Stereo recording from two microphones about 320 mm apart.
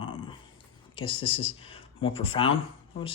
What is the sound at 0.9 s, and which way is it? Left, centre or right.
Speech, centre.